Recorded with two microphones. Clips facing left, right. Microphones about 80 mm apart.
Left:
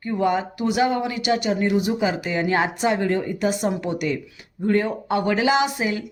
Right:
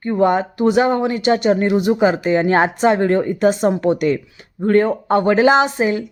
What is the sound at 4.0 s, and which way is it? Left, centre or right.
A woman's voice, right.